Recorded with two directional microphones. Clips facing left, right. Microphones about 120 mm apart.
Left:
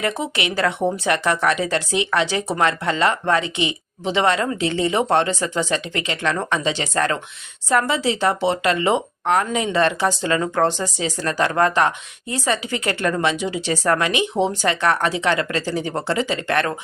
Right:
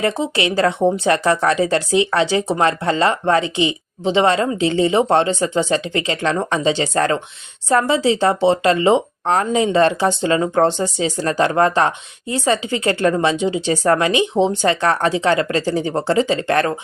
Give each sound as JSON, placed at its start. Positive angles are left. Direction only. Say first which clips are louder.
{"t": 0.0, "sound": "speech", "louder": "right 4 dB", "side_deg": -30}